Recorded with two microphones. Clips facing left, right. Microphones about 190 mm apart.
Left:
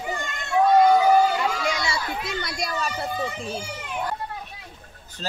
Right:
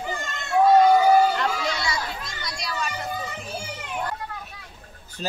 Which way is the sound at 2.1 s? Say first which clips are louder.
Left 5 dB; 65° left (ahead or behind).